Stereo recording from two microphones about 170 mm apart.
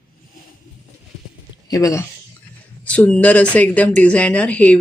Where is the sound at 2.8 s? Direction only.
10° left (ahead or behind).